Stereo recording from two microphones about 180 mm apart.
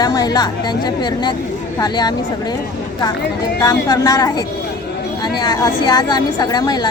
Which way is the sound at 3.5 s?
20° left (ahead or behind).